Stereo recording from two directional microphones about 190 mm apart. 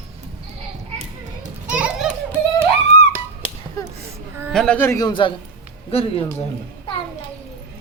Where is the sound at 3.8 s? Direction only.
15° left (ahead or behind).